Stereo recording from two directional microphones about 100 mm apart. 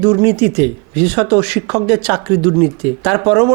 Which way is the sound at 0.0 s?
20° right (ahead or behind).